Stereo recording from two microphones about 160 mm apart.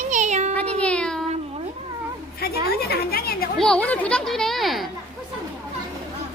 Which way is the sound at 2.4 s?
75° left (ahead or behind).